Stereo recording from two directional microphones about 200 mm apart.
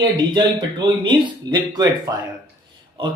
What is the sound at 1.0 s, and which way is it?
A man's voice, 20° right (ahead or behind).